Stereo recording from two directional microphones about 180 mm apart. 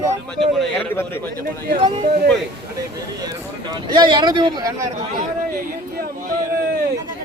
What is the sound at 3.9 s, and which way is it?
Speech, 25° right (ahead or behind).